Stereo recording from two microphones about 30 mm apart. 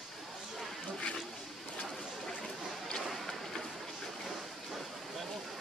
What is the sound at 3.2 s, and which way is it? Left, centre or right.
Vehicle, centre.